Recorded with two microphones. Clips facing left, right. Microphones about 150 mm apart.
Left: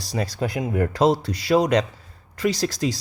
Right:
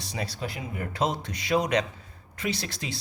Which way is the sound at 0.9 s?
35° left (ahead or behind).